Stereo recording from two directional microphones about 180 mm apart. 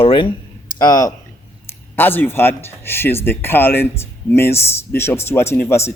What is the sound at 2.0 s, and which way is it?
Speech, 10° left (ahead or behind).